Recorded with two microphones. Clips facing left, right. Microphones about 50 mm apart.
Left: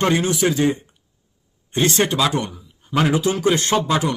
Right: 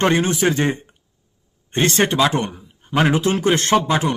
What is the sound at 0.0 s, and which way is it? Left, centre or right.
A man's voice, right.